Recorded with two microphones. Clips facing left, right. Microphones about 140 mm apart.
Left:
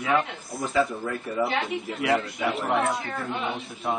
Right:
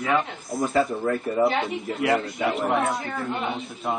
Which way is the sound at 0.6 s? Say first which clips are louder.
Right 3 dB; 45° right (ahead or behind).